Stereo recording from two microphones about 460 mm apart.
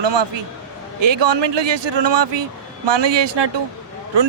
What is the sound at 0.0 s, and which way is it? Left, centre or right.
Speech, right.